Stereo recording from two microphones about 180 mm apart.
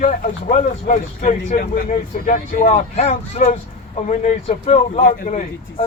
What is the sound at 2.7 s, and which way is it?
A man's voice, 35° left (ahead or behind).